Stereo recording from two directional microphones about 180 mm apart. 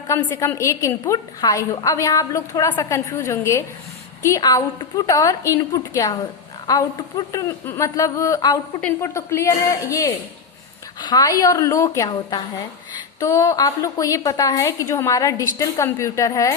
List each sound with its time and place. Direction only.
0.1 s a woman's voice: 15° left (ahead or behind)